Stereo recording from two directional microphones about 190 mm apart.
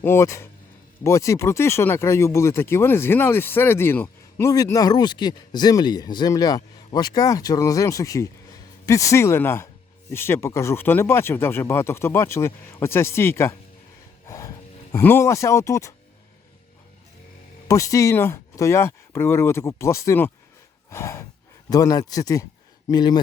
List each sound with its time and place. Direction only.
0.0 s speech: 15° left (ahead or behind)
14.3 s a sound: 15° left (ahead or behind)
14.9 s speech: 10° left (ahead or behind)
17.7 s speech: 15° left (ahead or behind)